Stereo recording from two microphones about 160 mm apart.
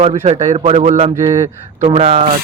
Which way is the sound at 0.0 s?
45° right (ahead or behind).